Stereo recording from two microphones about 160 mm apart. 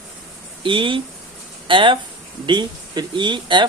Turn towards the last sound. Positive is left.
turn(degrees=-30)  # may be behind; listen again after turning